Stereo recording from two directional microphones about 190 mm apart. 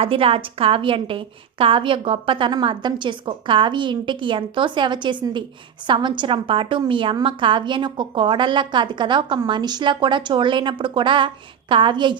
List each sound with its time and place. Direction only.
0.0 s a woman's voice: 30° right (ahead or behind)